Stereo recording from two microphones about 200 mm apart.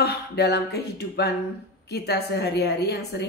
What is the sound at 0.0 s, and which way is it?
A woman's voice, 55° left (ahead or behind).